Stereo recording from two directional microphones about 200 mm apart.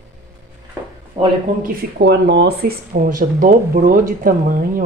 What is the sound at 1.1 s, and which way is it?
Speech, 45° right (ahead or behind).